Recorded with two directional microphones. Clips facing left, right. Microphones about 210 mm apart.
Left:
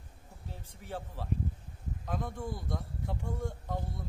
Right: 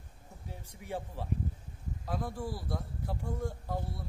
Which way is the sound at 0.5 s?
10° right (ahead or behind).